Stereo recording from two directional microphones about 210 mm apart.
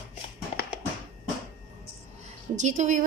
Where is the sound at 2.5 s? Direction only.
35° right (ahead or behind).